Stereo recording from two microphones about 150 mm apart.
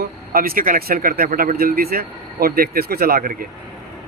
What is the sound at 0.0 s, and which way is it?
Speech, 75° right (ahead or behind).